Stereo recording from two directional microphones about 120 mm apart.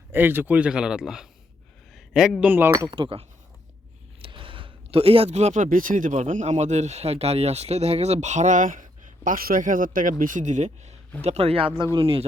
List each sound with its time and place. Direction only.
0.1 s speech: 15° right (ahead or behind)
1.9 s a sound: centre (ahead or behind)
2.5 s speech: 15° right (ahead or behind)
2.9 s speech: 40° right (ahead or behind)
4.2 s speech: 45° right (ahead or behind); by 6.2 s 90° right
6.3 s speech: 70° right (ahead or behind)
11.2 s speech: 60° right (ahead or behind)